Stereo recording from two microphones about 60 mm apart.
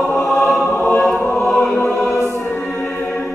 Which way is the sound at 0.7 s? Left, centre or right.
Left.